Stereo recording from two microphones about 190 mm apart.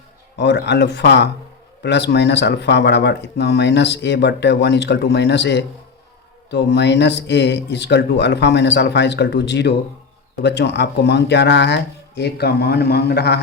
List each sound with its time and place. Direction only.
0.3 s speech: 65° left (ahead or behind)